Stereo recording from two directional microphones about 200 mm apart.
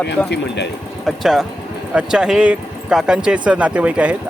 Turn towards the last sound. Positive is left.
turn(degrees=-5)  # may be behind; listen again after turning